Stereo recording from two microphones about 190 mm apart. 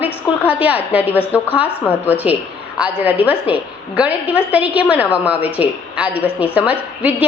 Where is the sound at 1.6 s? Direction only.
10° left (ahead or behind).